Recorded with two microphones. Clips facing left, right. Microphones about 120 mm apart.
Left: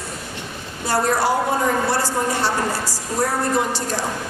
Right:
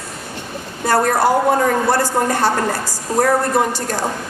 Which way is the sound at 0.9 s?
50° right (ahead or behind).